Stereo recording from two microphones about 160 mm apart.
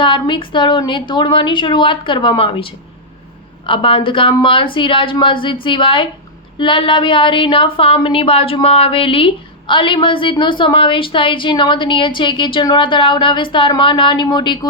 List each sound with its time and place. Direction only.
0.0 s speech: 30° left (ahead or behind)